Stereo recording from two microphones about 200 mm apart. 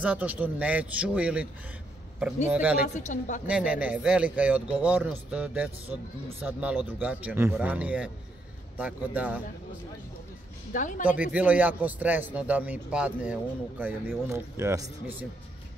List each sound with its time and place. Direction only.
0.0 s speech: 5° right (ahead or behind)
2.5 s speech: 10° right (ahead or behind)
2.9 s a woman's voice: 40° left (ahead or behind)
3.4 s speech: 5° right (ahead or behind)
10.7 s a woman's voice: 40° left (ahead or behind)
11.1 s speech: 10° right (ahead or behind)